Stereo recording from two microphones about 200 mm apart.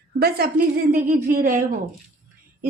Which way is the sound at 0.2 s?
50° right (ahead or behind).